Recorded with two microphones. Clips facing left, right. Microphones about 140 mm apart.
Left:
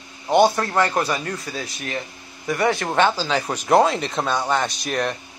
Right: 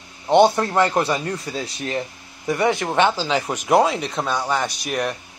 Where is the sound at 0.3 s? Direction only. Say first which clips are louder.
Right 2 dB; 20° right (ahead or behind).